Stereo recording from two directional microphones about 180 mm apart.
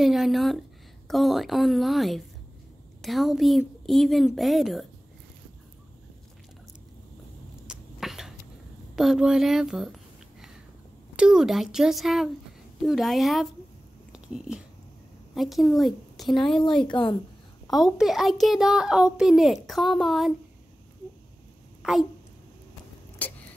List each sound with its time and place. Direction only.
0.0 s a child's voice: centre (ahead or behind)
7.6 s a sound: 5° right (ahead or behind)
8.9 s a child's voice: centre (ahead or behind)
11.1 s a child's voice: 5° right (ahead or behind)
14.1 s a sound: 5° right (ahead or behind)
15.3 s a woman's voice: centre (ahead or behind)
16.8 s a woman's voice: 25° left (ahead or behind)
17.9 s a child's voice: centre (ahead or behind)
21.8 s a child's voice: 5° right (ahead or behind)
23.2 s a sound: 10° left (ahead or behind)